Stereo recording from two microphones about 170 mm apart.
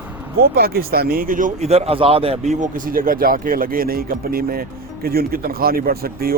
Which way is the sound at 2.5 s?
50° right (ahead or behind).